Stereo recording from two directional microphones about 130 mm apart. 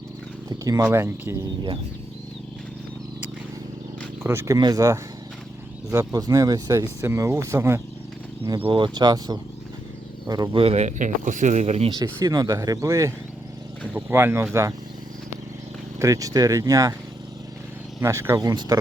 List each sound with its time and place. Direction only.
0.6 s speech: 25° right (ahead or behind)
4.2 s speech: 20° right (ahead or behind)
8.5 s speech: 40° right (ahead or behind)
10.5 s speech: 45° right (ahead or behind)
12.0 s speech: 30° right (ahead or behind)
16.0 s speech: 25° right (ahead or behind)
18.0 s speech: 20° right (ahead or behind)